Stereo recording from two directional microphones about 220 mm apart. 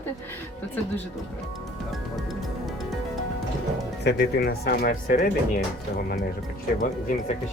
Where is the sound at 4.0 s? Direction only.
50° left (ahead or behind).